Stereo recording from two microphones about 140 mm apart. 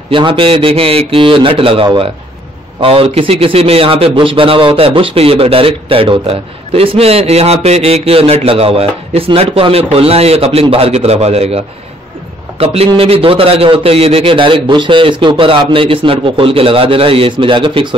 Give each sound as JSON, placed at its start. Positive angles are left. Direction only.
{"t": 0.1, "sound": "a man's voice", "side_deg": -35}